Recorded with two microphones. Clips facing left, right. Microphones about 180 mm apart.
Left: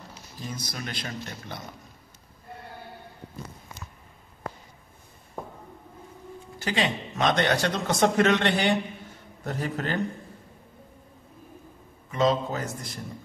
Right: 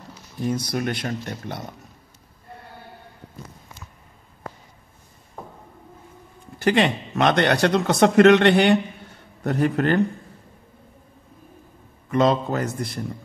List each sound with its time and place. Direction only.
0.4 s a man's voice: 65° right (ahead or behind)
6.6 s a man's voice: 60° right (ahead or behind)
12.1 s a man's voice: 65° right (ahead or behind)